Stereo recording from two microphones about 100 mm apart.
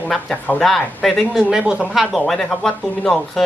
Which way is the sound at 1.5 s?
10° right (ahead or behind).